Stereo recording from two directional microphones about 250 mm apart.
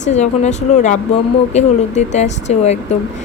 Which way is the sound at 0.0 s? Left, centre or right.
Left.